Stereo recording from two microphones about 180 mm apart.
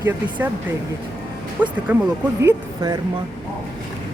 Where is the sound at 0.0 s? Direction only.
10° right (ahead or behind).